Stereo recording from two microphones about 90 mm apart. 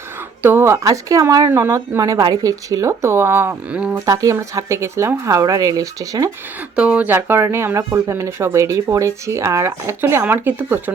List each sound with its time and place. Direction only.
0.4 s speech: 25° right (ahead or behind)
0.9 s speech: 40° right (ahead or behind)
1.5 s speech: 30° right (ahead or behind)
2.0 s speech: 40° right (ahead or behind)
3.9 s speech: 40° right (ahead or behind)
6.7 s speech: 15° right (ahead or behind)